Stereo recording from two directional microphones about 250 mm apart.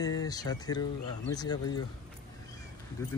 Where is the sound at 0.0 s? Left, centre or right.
Centre.